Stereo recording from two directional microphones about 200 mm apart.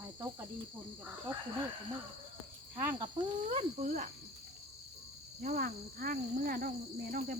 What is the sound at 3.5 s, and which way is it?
Speech, 35° right (ahead or behind).